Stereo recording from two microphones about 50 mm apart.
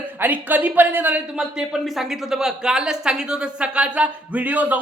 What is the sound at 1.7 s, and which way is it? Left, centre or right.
Speech, centre.